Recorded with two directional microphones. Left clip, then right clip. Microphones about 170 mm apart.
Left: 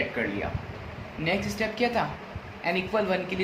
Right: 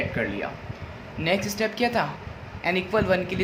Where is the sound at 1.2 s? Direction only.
45° right (ahead or behind).